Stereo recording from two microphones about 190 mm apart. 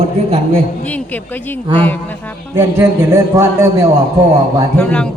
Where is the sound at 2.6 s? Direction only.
15° right (ahead or behind).